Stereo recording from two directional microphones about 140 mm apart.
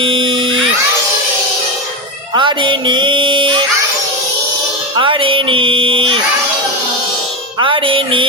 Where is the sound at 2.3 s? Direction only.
35° right (ahead or behind).